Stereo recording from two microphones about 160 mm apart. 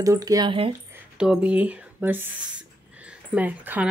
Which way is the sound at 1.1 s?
5° right (ahead or behind).